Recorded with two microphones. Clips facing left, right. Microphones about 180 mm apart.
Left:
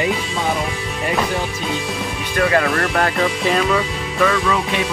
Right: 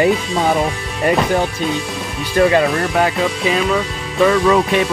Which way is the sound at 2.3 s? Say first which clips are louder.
Right 4 dB; 20° right (ahead or behind).